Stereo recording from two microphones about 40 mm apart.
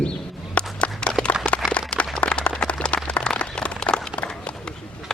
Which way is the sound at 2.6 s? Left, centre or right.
Left.